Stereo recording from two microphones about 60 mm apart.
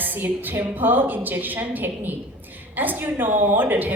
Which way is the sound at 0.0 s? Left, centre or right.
Right.